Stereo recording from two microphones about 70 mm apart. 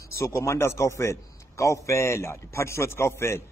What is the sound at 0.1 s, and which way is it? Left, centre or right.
A man's voice, left.